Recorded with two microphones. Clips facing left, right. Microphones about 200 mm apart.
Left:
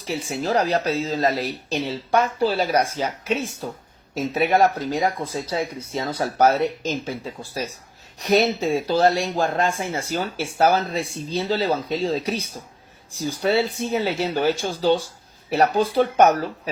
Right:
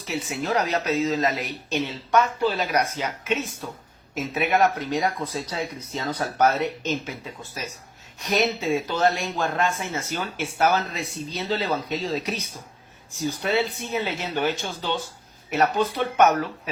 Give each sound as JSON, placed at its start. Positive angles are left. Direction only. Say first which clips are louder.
{"t": 0.1, "sound": "speech", "louder": "left 3 dB", "side_deg": 30}